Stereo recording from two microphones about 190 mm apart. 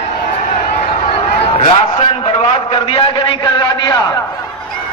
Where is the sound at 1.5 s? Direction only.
30° left (ahead or behind).